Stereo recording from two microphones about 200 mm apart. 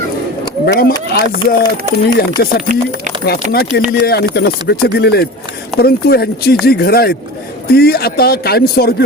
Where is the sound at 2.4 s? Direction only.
45° left (ahead or behind).